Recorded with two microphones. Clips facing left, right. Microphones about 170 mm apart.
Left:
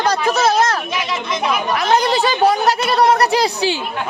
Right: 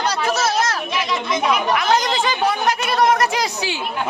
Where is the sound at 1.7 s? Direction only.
35° left (ahead or behind).